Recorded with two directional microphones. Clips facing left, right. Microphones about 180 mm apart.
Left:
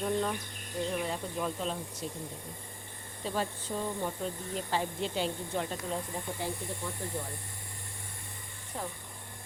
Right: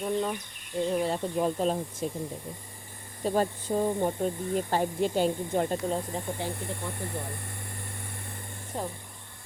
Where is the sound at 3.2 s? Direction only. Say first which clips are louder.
Right 7 dB; 45° right (ahead or behind).